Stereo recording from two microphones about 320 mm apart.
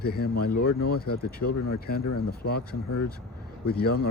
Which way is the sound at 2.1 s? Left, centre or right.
Left.